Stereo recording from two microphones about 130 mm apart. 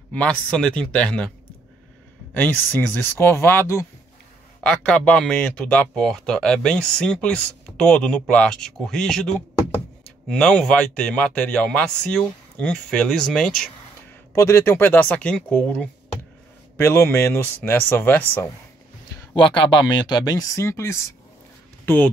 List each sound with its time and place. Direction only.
0.1 s speech: 10° left (ahead or behind)
2.3 s speech: 15° left (ahead or behind)
4.6 s speech: 10° left (ahead or behind)
14.3 s speech: 20° left (ahead or behind)
19.3 s speech: 40° left (ahead or behind); by 22.1 s 15° left (ahead or behind)